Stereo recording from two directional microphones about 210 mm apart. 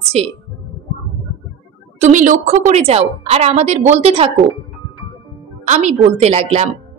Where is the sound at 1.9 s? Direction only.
35° right (ahead or behind).